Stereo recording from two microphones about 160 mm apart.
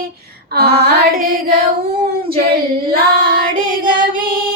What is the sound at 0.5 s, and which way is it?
Music, 85° right.